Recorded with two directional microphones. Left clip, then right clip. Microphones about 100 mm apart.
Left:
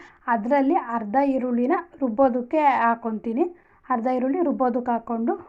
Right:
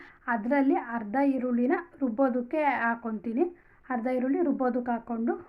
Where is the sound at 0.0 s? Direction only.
30° left (ahead or behind).